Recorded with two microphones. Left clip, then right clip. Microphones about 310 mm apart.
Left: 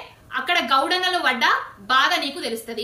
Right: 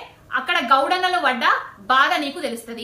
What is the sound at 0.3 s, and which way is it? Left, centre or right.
A woman's voice, centre.